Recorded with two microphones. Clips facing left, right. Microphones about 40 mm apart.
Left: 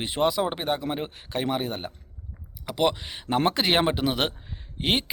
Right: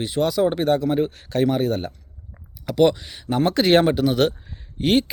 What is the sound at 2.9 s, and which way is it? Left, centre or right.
A man's voice, left.